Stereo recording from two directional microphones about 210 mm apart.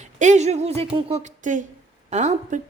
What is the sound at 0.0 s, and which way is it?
Speech, 35° right (ahead or behind).